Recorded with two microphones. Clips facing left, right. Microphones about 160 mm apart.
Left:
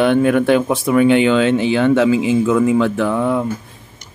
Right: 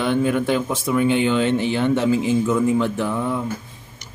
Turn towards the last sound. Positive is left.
turn(degrees=70)  # may be behind; listen again after turning